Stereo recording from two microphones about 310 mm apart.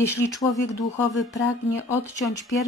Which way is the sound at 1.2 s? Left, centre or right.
Centre.